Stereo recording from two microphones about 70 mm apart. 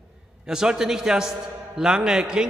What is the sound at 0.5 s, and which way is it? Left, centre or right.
A man's voice, centre.